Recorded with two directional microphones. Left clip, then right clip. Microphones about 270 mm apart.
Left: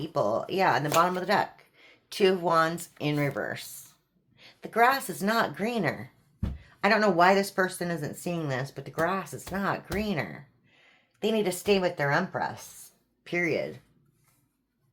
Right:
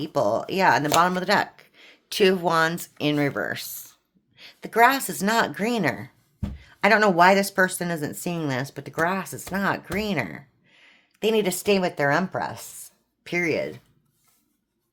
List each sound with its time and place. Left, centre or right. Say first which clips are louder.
0.0 s speech: right 4 dB; right